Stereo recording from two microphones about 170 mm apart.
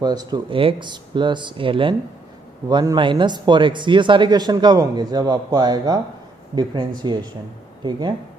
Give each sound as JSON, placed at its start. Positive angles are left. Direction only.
{"t": 0.0, "sound": "a man's voice", "side_deg": -25}
{"t": 7.0, "sound": "a man's voice", "side_deg": -25}